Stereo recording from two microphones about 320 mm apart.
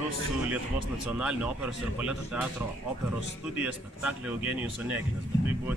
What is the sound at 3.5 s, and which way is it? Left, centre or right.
Speech, centre.